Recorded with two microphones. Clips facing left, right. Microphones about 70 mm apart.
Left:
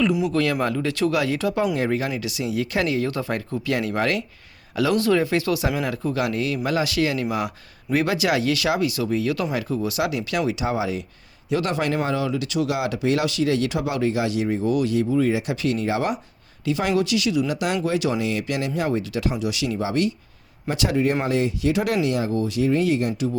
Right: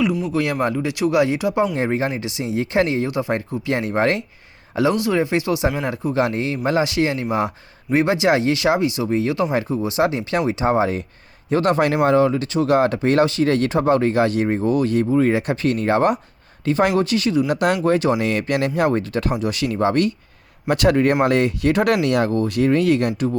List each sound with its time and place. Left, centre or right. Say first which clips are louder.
0.1 s speech: left 1 dB; centre
0.6 s speech: right 2 dB; centre
6.1 s speech: right 5 dB; right